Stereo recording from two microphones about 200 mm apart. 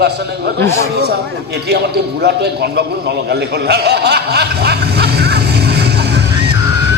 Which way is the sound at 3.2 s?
55° right (ahead or behind).